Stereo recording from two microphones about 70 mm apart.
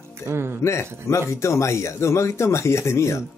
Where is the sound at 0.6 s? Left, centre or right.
Left.